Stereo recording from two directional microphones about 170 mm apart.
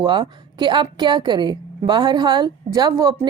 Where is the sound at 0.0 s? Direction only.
30° right (ahead or behind).